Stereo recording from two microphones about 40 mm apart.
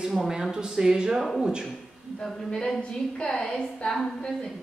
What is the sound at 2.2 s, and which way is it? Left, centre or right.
A woman's voice, centre.